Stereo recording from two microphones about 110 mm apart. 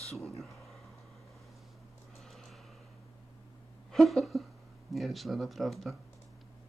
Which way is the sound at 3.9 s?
Centre (ahead or behind).